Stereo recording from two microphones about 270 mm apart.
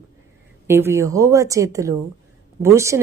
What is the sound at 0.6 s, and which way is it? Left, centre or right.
Speech, centre.